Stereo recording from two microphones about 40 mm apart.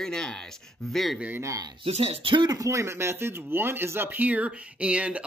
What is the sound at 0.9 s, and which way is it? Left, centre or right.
Speech, centre.